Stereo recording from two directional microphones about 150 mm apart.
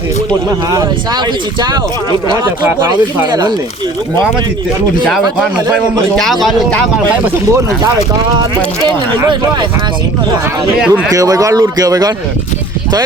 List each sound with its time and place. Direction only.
0.7 s speech: 25° right (ahead or behind)
6.4 s speech: 5° left (ahead or behind)
9.2 s speech: 30° right (ahead or behind)
10.8 s speech: 5° right (ahead or behind)
11.1 s speech: 25° right (ahead or behind)